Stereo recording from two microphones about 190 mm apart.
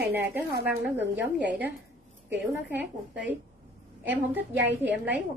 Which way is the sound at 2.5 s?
10° right (ahead or behind).